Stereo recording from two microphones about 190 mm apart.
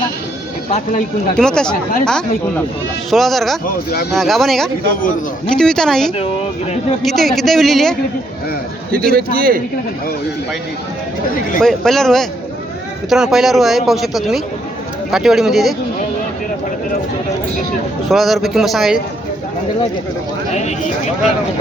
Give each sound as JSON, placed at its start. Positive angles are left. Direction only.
{"t": 1.4, "sound": "speech", "side_deg": 5}
{"t": 6.1, "sound": "speech", "side_deg": 30}
{"t": 7.0, "sound": "speech", "side_deg": 0}
{"t": 8.9, "sound": "speech", "side_deg": -50}
{"t": 11.6, "sound": "speech", "side_deg": 0}
{"t": 18.1, "sound": "speech", "side_deg": 0}
{"t": 20.5, "sound": "speech", "side_deg": 35}